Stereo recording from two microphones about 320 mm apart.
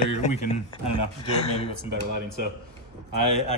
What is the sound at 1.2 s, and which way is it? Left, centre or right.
Speech, centre.